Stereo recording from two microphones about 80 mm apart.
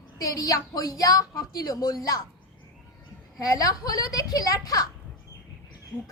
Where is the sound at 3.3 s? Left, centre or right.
Left.